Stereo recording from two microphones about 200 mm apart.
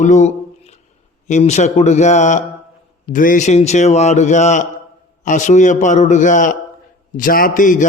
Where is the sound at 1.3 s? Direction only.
35° left (ahead or behind).